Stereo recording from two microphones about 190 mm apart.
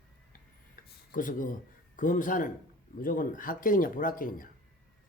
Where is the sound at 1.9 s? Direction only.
45° left (ahead or behind).